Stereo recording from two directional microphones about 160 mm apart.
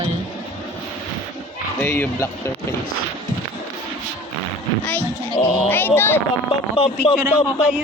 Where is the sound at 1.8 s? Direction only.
10° left (ahead or behind).